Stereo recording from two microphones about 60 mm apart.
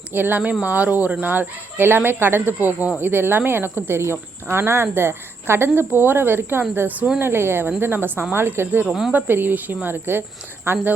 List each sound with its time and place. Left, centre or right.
0.1 s speech: right
7.2 s speech: right
8.9 s speech: centre
9.1 s speech: right